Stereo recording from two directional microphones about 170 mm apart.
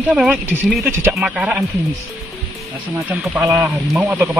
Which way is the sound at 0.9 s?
15° right (ahead or behind).